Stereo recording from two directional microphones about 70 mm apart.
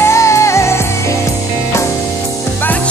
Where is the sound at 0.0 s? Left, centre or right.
Left.